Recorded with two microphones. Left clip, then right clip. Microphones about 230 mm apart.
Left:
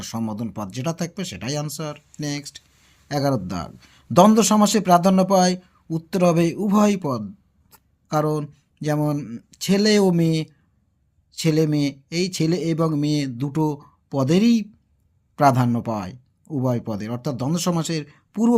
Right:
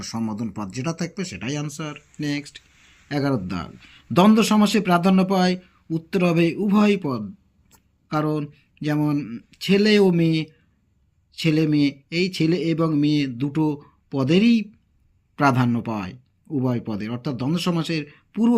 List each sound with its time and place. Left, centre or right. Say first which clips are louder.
0.0 s a man's voice: even; left